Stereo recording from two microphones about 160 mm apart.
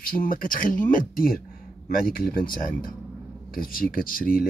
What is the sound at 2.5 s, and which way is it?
Speech, 60° left (ahead or behind).